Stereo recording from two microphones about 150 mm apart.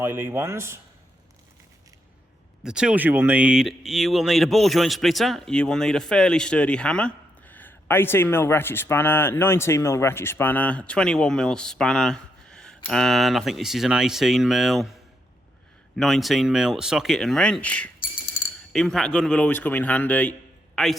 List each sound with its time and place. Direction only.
0.0 s speech: 15° right (ahead or behind)
2.6 s speech: 5° right (ahead or behind)
16.0 s a man's voice: centre (ahead or behind)